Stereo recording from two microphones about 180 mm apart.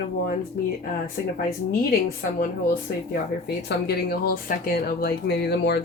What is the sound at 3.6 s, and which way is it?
Speech, 60° left (ahead or behind).